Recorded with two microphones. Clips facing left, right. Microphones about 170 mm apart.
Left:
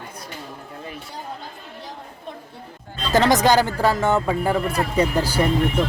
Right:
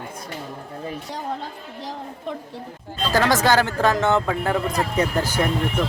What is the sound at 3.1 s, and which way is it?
Speech, 20° left (ahead or behind).